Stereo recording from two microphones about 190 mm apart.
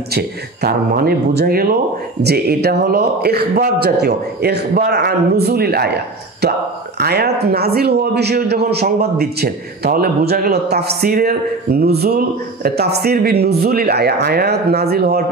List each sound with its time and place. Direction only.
0.1 s a man's voice: 55° right (ahead or behind)